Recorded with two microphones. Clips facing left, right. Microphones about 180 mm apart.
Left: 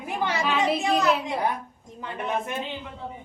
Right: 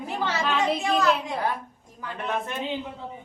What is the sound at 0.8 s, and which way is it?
A child's voice, 20° left (ahead or behind).